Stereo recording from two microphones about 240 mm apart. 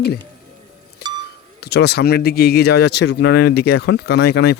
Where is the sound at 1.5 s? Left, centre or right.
Left.